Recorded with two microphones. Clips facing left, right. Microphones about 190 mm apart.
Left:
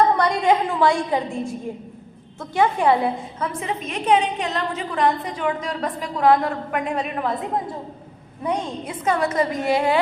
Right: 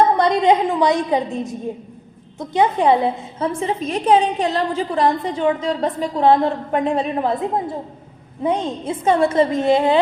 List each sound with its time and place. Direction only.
0.2 s a woman's voice: 20° right (ahead or behind)